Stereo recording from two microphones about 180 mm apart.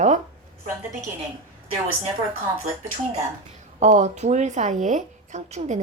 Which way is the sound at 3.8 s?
40° right (ahead or behind).